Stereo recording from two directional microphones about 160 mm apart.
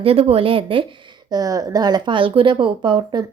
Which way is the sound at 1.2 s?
25° right (ahead or behind).